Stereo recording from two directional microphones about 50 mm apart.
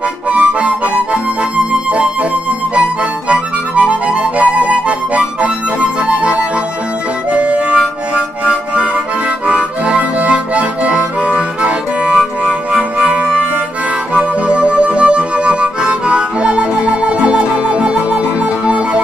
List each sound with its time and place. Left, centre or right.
0.3 s harmonica: right
3.3 s harmonica: right